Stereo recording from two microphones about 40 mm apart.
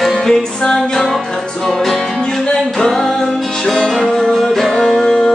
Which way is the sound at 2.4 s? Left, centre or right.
Centre.